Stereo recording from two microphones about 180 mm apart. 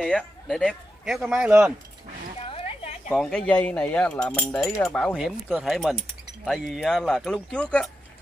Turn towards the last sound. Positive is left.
turn(degrees=0)  # may be behind; listen again after turning